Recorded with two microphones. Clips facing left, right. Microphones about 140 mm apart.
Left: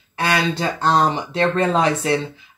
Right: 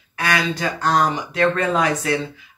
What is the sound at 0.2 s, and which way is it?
Speech, 30° left (ahead or behind).